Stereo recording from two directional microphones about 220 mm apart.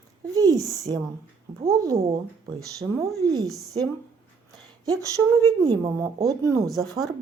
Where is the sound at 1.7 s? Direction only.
15° right (ahead or behind).